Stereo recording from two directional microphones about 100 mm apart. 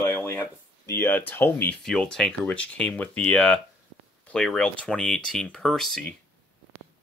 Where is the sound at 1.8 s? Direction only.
5° left (ahead or behind).